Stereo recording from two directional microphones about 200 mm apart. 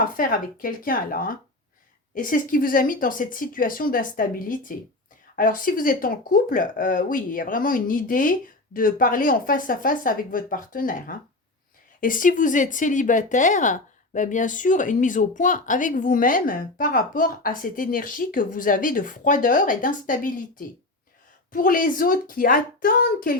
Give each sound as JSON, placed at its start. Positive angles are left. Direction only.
{"t": 0.0, "sound": "speech", "side_deg": 45}